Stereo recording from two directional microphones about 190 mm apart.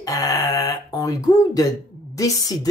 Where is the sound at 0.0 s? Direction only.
20° left (ahead or behind).